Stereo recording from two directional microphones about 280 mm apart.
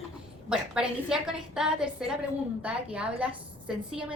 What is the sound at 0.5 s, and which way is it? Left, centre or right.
A woman's voice, centre.